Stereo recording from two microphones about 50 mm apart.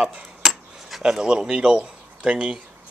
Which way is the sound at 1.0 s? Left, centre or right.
Centre.